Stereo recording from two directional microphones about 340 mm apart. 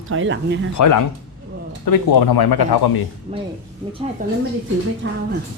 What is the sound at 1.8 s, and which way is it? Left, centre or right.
Speech, left.